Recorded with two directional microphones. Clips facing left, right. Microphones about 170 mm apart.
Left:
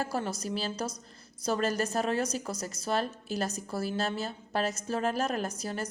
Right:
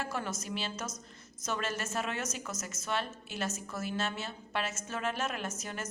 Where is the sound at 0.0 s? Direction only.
35° left (ahead or behind).